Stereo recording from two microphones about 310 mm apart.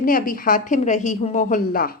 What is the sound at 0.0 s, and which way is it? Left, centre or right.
A woman's voice, left.